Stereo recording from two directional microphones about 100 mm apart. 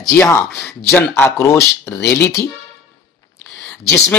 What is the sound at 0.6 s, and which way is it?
Speech, 25° left (ahead or behind).